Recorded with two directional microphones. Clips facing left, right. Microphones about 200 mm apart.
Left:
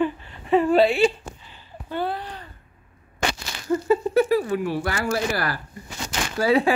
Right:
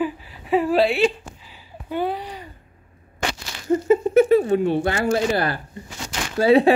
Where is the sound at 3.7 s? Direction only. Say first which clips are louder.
Right 4 dB; 20° right (ahead or behind).